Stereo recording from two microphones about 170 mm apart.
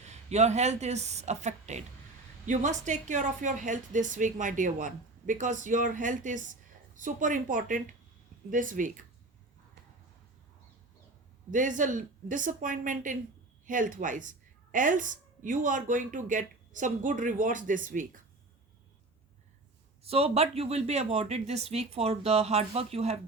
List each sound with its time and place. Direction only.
0.0 s a woman's voice: 40° right (ahead or behind)
11.5 s a woman's voice: 50° right (ahead or behind)
20.1 s speech: 35° right (ahead or behind)